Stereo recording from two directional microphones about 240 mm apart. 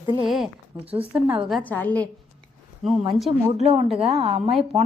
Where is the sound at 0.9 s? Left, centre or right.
Right.